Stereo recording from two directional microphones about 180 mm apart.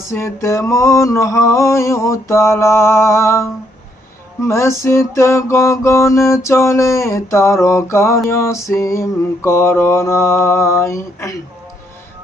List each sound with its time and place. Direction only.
0.1 s music: 15° left (ahead or behind)